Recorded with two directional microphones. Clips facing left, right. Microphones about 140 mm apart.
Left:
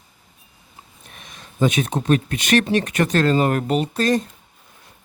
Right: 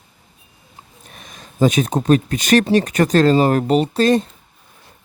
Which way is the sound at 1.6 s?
35° right (ahead or behind).